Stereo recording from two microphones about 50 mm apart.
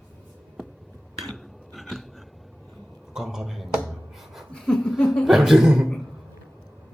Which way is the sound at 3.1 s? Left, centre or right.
Centre.